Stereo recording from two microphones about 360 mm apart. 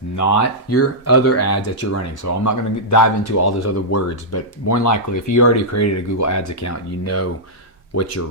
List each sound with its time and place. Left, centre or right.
0.2 s speech: left